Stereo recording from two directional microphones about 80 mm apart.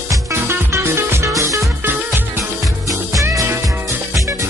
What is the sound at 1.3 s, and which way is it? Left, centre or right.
Music, right.